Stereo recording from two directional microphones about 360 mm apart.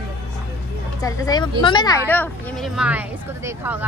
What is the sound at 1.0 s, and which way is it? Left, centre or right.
A woman's voice, centre.